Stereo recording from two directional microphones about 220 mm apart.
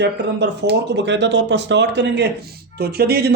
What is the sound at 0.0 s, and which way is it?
Speech, 50° right (ahead or behind).